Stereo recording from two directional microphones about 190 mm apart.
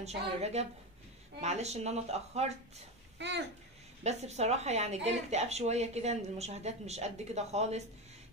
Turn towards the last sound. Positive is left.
turn(degrees=-35)  # may be behind; listen again after turning